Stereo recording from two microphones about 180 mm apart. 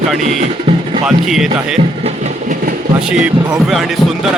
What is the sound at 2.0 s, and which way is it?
Train, 40° right (ahead or behind).